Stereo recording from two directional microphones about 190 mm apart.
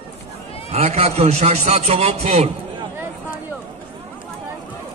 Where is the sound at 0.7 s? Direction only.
35° right (ahead or behind).